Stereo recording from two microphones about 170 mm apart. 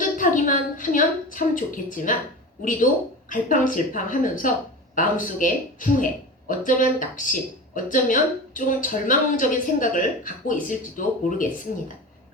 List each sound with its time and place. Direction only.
0.2 s a woman's voice: 50° left (ahead or behind)
3.2 s speech: 50° left (ahead or behind)